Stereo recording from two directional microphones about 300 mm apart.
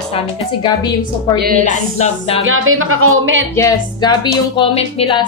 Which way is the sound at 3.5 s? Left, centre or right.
Centre.